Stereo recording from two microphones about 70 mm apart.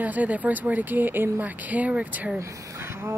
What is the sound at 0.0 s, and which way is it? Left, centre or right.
Speech, right.